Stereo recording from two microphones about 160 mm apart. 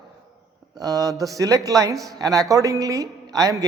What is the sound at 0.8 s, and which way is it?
A man's voice, 20° right (ahead or behind).